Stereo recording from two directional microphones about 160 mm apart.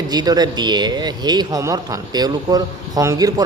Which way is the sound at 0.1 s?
25° right (ahead or behind).